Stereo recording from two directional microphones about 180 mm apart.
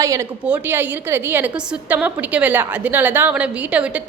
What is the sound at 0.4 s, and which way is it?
A woman's voice, 10° right (ahead or behind).